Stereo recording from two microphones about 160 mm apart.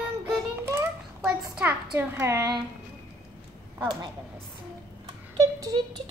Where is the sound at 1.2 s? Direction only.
10° right (ahead or behind).